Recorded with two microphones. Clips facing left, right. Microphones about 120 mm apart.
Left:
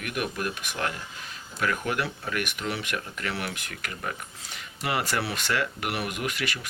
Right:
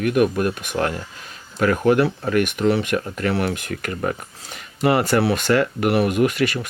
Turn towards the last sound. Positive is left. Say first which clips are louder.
# right 12 dB
turn(degrees=-45)  # may be behind; listen again after turning